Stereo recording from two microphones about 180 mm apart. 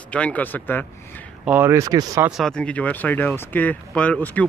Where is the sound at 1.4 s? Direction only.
10° right (ahead or behind).